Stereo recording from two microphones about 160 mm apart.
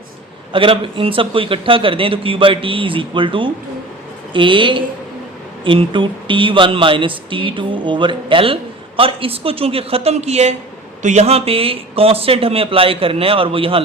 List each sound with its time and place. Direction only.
0.5 s a man's voice: 35° right (ahead or behind)